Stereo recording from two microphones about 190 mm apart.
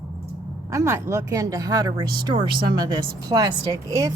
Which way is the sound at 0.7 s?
15° right (ahead or behind).